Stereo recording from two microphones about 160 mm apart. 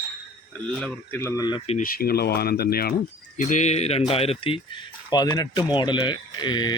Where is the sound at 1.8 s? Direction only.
65° left (ahead or behind).